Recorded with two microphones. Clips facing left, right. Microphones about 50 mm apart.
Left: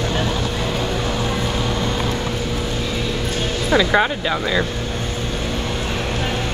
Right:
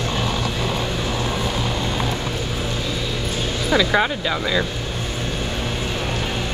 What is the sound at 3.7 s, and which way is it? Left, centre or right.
Speech, centre.